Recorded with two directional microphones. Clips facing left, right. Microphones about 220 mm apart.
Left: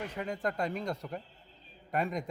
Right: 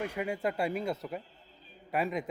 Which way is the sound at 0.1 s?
10° right (ahead or behind).